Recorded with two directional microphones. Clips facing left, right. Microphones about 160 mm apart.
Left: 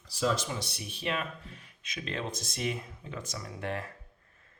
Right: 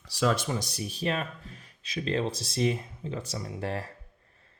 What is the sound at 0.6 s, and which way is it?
Speech, 40° right (ahead or behind).